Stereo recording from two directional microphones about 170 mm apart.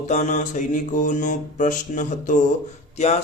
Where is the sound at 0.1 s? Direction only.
45° left (ahead or behind).